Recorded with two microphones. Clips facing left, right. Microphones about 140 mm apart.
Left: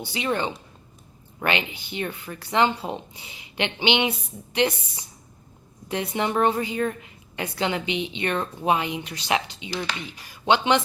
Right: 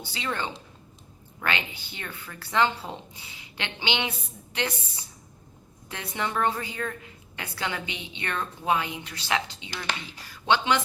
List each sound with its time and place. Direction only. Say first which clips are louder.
0.0 s a woman's voice: left 6 dB; 15° left (ahead or behind)